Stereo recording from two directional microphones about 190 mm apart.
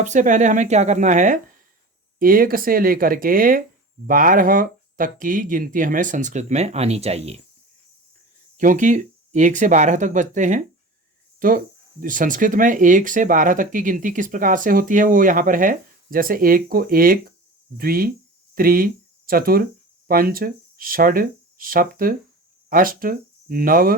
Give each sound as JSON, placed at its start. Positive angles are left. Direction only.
{"t": 0.0, "sound": "speech", "side_deg": -40}
{"t": 8.5, "sound": "speech", "side_deg": -40}